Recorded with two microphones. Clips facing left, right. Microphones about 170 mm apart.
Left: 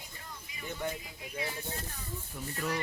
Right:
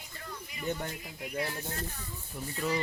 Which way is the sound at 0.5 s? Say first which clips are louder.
Right 2 dB; 65° right (ahead or behind).